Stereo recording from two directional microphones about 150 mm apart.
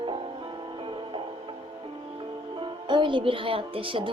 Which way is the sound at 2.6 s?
30° right (ahead or behind).